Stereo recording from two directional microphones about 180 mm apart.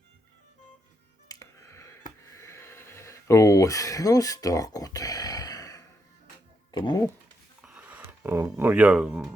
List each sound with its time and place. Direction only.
1.3 s music: 15° left (ahead or behind)
2.2 s a sound: 15° left (ahead or behind)
6.7 s speech: 25° left (ahead or behind)
7.6 s speech: 5° right (ahead or behind)